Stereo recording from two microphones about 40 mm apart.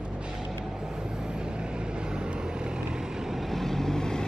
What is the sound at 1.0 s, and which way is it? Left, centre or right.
Vehicle, centre.